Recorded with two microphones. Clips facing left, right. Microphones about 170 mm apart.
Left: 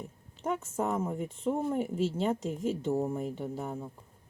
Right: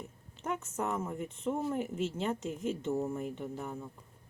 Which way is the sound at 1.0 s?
30° left (ahead or behind).